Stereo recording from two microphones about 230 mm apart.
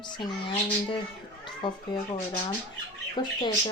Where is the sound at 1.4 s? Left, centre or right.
Left.